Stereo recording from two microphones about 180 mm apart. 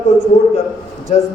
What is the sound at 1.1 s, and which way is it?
Speech, 40° left (ahead or behind).